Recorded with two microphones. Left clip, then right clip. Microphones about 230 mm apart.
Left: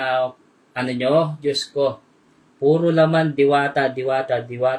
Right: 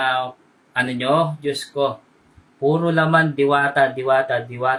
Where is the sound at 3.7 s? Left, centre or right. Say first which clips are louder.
Right 3 dB; right.